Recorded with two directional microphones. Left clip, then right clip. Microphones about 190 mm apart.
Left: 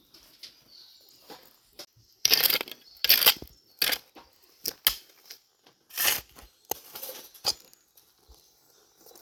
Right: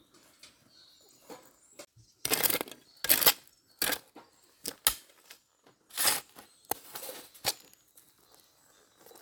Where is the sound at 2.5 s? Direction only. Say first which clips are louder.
Left 6 dB; 10° right (ahead or behind).